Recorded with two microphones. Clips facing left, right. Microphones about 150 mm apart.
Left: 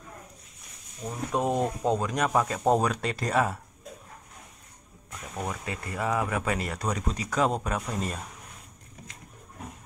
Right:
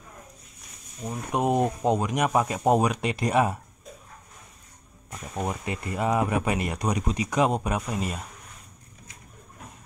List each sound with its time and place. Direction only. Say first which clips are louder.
1.0 s speech: right 2 dB; 15° right (ahead or behind)
5.3 s speech: right 4 dB; 20° right (ahead or behind)